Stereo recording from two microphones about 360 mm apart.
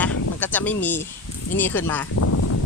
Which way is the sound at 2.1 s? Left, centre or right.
Left.